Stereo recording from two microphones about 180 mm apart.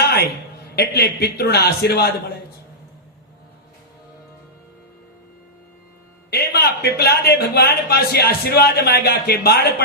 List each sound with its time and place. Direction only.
0.0 s a sound: 65° left (ahead or behind)
0.8 s a man's voice: 60° left (ahead or behind)
6.3 s a man's voice: 60° left (ahead or behind)